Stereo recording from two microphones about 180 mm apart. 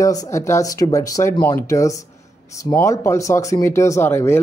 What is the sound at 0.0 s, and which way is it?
Speech, 20° left (ahead or behind).